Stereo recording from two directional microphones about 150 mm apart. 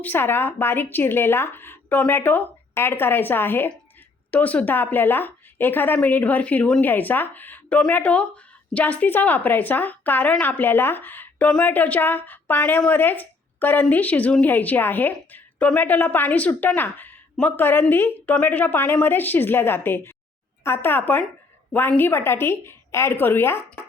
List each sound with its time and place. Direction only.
0.0 s a woman's voice: 15° left (ahead or behind)